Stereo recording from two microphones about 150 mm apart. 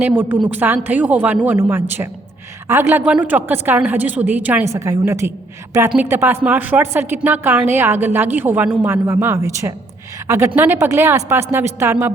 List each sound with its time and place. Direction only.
0.0 s a woman's voice: 15° right (ahead or behind)